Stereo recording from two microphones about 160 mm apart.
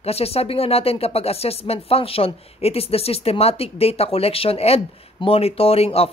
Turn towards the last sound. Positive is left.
turn(degrees=40)  # may be behind; listen again after turning